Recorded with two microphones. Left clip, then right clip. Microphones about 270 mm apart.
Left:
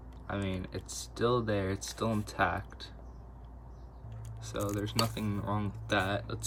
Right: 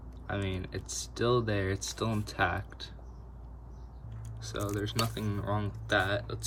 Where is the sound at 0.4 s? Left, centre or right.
Centre.